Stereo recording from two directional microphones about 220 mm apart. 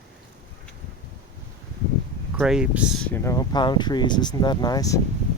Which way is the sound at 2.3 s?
5° right (ahead or behind).